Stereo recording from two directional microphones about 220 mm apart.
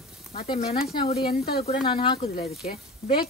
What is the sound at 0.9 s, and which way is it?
Speech, 25° left (ahead or behind).